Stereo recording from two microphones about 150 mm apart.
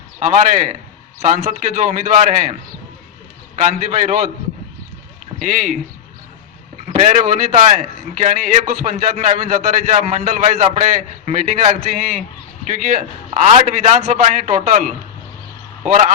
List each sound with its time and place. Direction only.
0.2 s a man's voice: 55° right (ahead or behind)
5.4 s a man's voice: 55° right (ahead or behind)
6.8 s a man's voice: 50° right (ahead or behind)